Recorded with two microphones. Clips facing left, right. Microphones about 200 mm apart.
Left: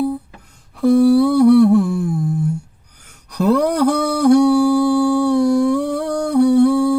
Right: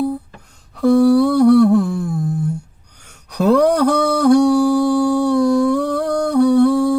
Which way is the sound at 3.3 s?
75° right (ahead or behind).